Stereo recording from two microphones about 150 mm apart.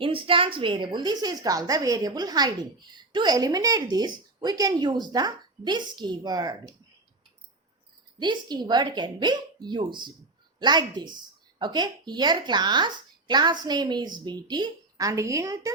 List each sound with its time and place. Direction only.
0.0 s speech: 35° right (ahead or behind)
8.2 s speech: 30° right (ahead or behind)